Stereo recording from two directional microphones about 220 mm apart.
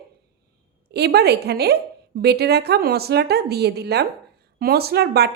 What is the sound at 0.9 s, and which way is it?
A woman's voice, 45° right (ahead or behind).